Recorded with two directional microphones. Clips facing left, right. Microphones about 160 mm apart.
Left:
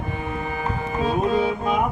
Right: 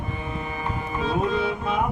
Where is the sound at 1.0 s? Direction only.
35° left (ahead or behind).